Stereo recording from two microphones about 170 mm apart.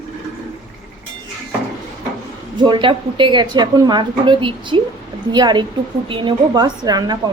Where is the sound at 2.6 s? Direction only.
30° right (ahead or behind).